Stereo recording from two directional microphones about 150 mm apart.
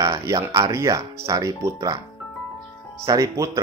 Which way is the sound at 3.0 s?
25° right (ahead or behind).